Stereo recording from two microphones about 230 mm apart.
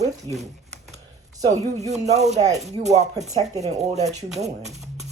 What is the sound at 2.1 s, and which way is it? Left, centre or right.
Speech, right.